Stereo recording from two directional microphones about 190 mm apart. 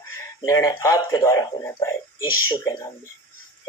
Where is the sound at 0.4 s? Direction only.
20° left (ahead or behind).